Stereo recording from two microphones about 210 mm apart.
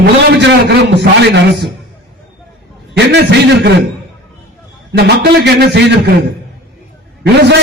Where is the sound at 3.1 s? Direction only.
55° right (ahead or behind).